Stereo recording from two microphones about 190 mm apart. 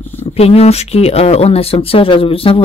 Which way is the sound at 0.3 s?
30° left (ahead or behind).